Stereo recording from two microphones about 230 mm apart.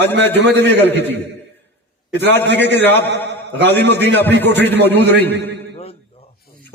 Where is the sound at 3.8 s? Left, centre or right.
Right.